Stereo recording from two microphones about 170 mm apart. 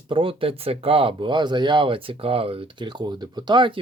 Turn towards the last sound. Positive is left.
turn(degrees=-25)  # may be behind; listen again after turning